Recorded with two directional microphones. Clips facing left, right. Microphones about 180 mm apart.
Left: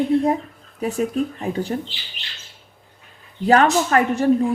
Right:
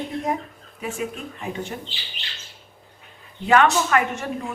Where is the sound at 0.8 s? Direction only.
40° left (ahead or behind).